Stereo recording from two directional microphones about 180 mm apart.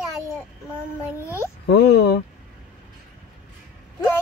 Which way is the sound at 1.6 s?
65° left (ahead or behind).